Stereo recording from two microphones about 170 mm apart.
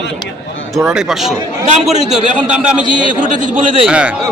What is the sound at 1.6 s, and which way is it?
Speech, 40° right (ahead or behind).